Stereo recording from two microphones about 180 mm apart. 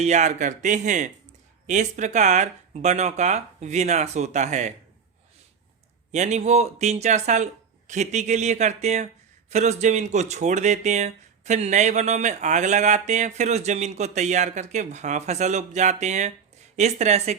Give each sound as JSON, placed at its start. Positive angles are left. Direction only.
{"t": 0.0, "sound": "speech", "side_deg": -40}
{"t": 6.1, "sound": "speech", "side_deg": -40}